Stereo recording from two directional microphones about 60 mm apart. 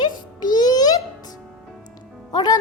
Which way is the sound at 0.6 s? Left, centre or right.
Left.